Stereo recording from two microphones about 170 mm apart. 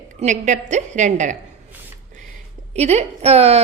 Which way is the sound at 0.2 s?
45° right (ahead or behind).